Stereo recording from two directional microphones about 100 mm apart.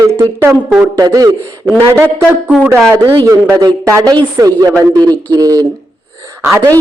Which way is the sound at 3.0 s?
45° right (ahead or behind).